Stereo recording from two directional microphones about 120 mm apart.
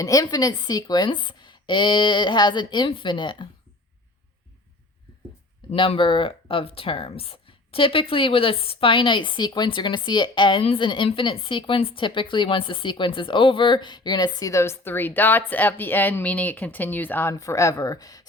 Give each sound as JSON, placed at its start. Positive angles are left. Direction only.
{"t": 0.0, "sound": "speech", "side_deg": 30}
{"t": 5.7, "sound": "a woman's voice", "side_deg": 45}